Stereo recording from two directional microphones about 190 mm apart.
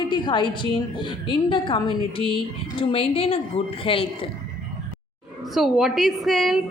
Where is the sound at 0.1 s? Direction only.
25° left (ahead or behind).